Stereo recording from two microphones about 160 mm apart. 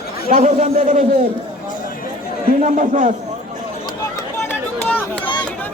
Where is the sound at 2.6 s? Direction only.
55° right (ahead or behind).